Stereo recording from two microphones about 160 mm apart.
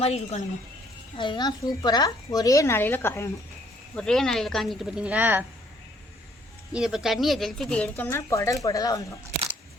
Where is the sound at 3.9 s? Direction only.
5° left (ahead or behind).